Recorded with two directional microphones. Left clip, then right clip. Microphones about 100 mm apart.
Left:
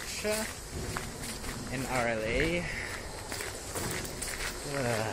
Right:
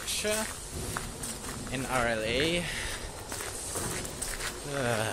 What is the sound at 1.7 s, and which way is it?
Speech, 20° right (ahead or behind).